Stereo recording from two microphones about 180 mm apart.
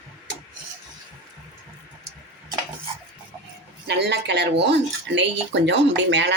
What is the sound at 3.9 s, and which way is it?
Speech, 70° right (ahead or behind).